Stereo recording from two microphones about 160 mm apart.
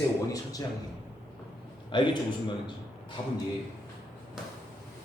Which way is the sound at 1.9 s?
30° left (ahead or behind).